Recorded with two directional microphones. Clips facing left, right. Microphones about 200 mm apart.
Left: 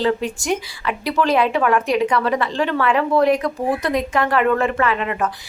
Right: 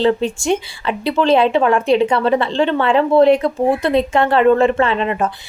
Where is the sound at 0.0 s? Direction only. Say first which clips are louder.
Right 4 dB; 25° right (ahead or behind).